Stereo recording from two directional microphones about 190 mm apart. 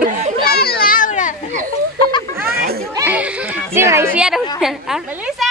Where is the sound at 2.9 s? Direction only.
10° right (ahead or behind).